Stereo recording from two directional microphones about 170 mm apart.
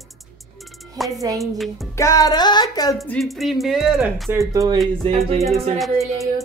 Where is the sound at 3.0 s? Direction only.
Centre (ahead or behind).